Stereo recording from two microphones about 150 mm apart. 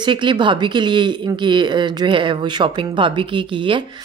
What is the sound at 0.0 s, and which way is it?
A woman's voice, 30° right (ahead or behind).